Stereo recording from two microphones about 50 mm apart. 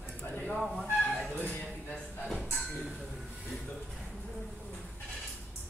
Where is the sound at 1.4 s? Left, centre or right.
Left.